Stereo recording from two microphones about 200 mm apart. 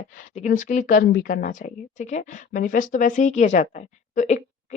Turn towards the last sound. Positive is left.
turn(degrees=40)  # may be behind; listen again after turning